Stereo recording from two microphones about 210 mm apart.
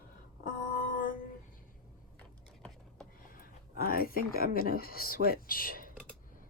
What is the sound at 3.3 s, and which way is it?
Speech, 45° left (ahead or behind).